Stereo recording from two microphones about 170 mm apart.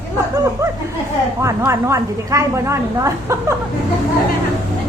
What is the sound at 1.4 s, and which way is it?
A woman's voice, 20° right (ahead or behind).